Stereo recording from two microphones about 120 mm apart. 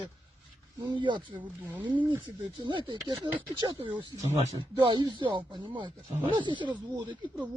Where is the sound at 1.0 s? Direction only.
45° right (ahead or behind).